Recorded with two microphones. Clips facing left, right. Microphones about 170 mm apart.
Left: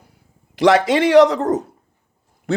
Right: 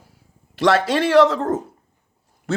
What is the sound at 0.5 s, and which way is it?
Speech, 20° left (ahead or behind).